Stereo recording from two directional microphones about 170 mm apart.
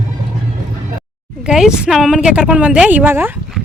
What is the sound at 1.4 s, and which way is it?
Speech, 5° right (ahead or behind).